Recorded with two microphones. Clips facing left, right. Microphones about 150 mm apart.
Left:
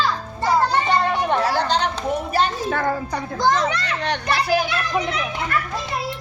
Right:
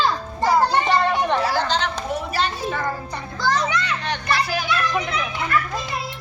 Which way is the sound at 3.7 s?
35° left (ahead or behind).